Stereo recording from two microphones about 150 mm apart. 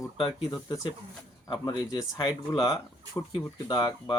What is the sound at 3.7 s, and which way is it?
Speech, 30° left (ahead or behind).